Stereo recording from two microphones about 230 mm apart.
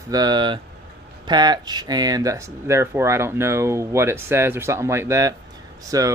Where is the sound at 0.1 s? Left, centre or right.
Centre.